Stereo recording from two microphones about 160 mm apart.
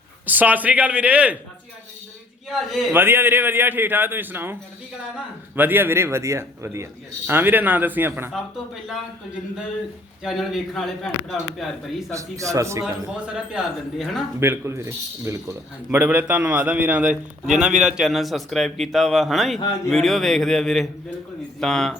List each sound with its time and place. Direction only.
0.3 s a man's voice: 10° right (ahead or behind)
2.5 s a man's voice: centre (ahead or behind)
2.9 s a man's voice: 15° right (ahead or behind)
5.5 s a man's voice: 15° right (ahead or behind)
8.3 s a man's voice: centre (ahead or behind)
10.2 s a man's voice: centre (ahead or behind)
12.1 s a man's voice: 20° right (ahead or behind)
13.3 s a man's voice: 5° right (ahead or behind)
14.3 s a man's voice: 15° right (ahead or behind); by 21.9 s 5° left (ahead or behind)